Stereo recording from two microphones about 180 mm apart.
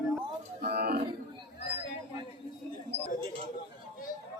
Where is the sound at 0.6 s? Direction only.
60° right (ahead or behind).